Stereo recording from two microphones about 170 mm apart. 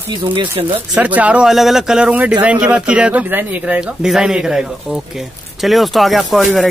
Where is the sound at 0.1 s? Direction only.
30° right (ahead or behind).